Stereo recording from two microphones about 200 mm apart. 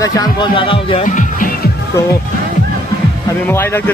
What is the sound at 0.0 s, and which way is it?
Speech, 20° left (ahead or behind).